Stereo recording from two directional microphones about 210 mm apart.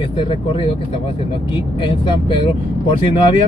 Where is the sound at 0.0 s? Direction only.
25° left (ahead or behind).